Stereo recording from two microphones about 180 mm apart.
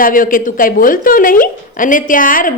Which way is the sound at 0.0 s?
50° left (ahead or behind).